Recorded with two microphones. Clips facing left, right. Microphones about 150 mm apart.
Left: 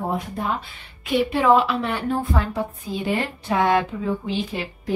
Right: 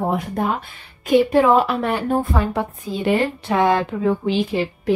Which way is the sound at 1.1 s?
45° right (ahead or behind).